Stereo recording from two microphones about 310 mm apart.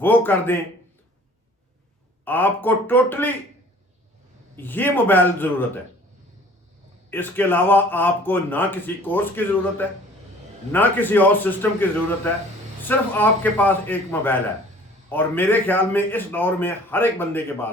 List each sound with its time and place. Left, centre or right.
0.0 s speech: centre
2.2 s speech: centre
4.5 s speech: centre
7.1 s a man's voice: centre